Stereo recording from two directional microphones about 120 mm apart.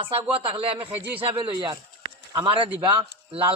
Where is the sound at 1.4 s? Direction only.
45° right (ahead or behind).